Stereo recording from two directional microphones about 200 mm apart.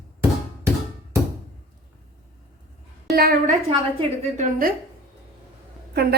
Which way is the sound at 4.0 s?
30° right (ahead or behind).